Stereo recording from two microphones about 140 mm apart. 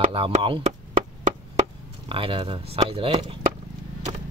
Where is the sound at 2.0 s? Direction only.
40° right (ahead or behind).